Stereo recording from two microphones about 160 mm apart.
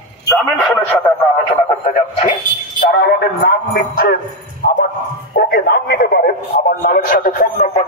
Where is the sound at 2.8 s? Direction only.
75° left (ahead or behind).